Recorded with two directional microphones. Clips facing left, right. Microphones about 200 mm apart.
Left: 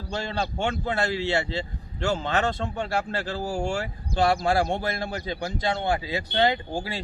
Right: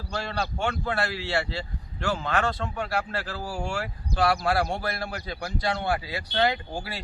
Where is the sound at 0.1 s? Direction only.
25° left (ahead or behind).